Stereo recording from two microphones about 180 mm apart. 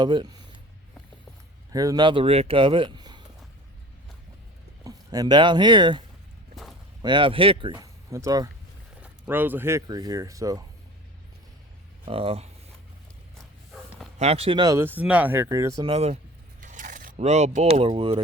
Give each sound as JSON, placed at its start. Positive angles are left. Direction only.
{"t": 0.0, "sound": "speech", "side_deg": -25}
{"t": 1.7, "sound": "speech", "side_deg": -20}
{"t": 4.8, "sound": "speech", "side_deg": -20}
{"t": 6.6, "sound": "a sound", "side_deg": 0}
{"t": 7.0, "sound": "speech", "side_deg": -25}
{"t": 12.0, "sound": "speech", "side_deg": -30}
{"t": 14.2, "sound": "speech", "side_deg": -35}
{"t": 15.9, "sound": "speech", "side_deg": -35}